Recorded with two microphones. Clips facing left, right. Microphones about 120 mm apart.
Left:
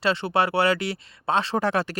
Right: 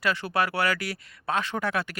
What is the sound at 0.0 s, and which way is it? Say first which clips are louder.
Speech: left 4 dB; 25° left (ahead or behind).